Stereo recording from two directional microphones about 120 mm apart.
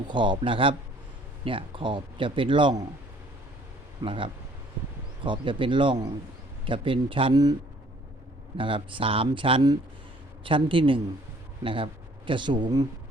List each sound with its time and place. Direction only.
0.1 s a man's voice: 40° right (ahead or behind)
4.0 s a man's voice: 45° right (ahead or behind)
8.5 s a man's voice: 45° right (ahead or behind)